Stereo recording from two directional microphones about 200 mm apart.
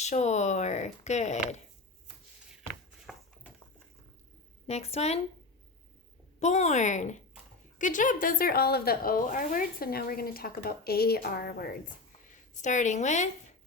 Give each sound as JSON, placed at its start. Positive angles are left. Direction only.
{"t": 0.0, "sound": "speech", "side_deg": 35}
{"t": 3.1, "sound": "a sound", "side_deg": 5}
{"t": 4.6, "sound": "speech", "side_deg": 30}
{"t": 6.4, "sound": "a woman's voice", "side_deg": 35}